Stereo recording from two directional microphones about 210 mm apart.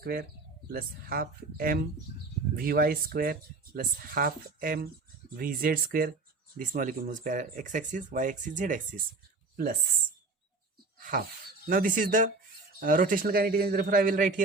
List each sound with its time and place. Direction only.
0.0 s speech: 45° right (ahead or behind)
11.7 s speech: 40° right (ahead or behind)